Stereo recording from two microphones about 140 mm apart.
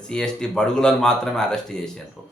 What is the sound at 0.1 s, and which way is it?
Speech, 5° left (ahead or behind).